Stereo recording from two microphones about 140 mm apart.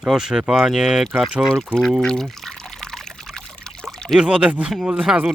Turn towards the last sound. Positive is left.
turn(degrees=-5)  # may be behind; listen again after turning